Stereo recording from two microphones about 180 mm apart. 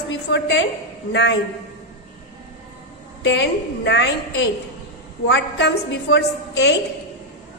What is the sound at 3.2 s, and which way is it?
A woman's voice, 75° left (ahead or behind).